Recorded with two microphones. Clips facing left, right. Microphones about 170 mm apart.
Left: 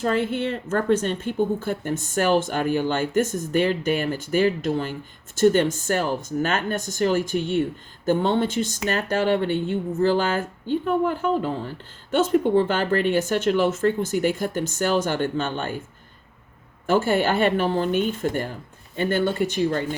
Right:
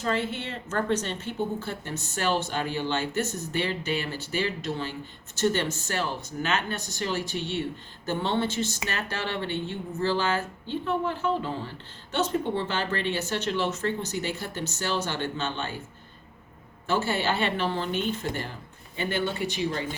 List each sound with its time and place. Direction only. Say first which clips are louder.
0.0 s a woman's voice: left 6 dB; 50° left (ahead or behind)
16.8 s a woman's voice: left 6 dB; 50° left (ahead or behind)